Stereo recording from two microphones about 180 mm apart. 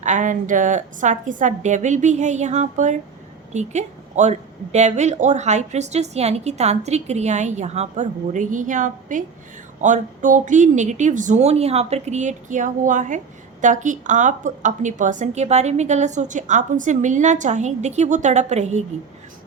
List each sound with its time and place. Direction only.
0.0 s a woman's voice: 45° right (ahead or behind)